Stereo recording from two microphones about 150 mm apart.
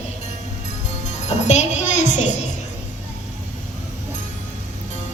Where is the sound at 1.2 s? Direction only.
50° left (ahead or behind).